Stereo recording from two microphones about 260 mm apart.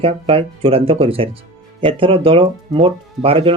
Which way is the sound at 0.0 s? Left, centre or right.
Right.